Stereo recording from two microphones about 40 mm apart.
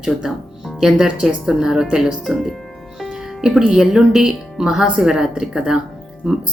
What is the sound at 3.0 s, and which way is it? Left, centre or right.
Music, centre.